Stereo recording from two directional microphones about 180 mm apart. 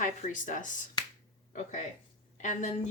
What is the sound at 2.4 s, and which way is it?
Speech, 40° left (ahead or behind).